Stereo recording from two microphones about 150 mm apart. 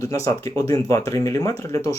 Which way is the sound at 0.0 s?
20° left (ahead or behind).